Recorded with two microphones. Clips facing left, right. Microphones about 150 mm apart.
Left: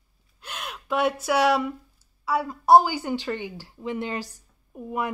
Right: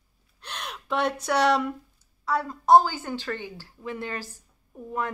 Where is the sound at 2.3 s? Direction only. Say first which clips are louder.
Left 1 dB; 10° left (ahead or behind).